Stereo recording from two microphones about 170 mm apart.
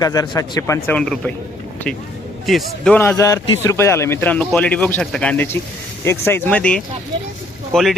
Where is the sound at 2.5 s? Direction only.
Centre (ahead or behind).